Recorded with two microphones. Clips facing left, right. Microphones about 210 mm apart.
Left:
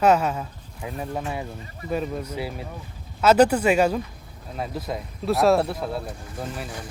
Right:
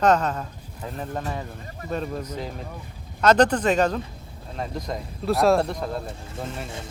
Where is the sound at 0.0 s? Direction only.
10° left (ahead or behind).